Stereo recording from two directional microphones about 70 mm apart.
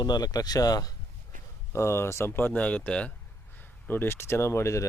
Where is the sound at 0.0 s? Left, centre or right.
Left.